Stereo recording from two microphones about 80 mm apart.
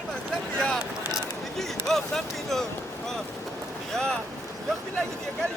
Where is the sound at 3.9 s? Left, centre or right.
Centre.